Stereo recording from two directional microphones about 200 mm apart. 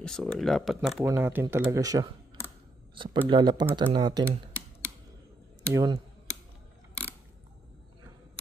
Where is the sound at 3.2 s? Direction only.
25° right (ahead or behind).